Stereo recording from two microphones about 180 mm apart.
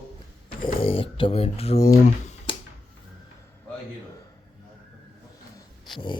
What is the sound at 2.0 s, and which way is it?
Typing, 40° left (ahead or behind).